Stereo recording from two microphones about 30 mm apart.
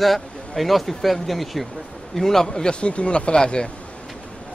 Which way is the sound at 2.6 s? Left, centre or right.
Left.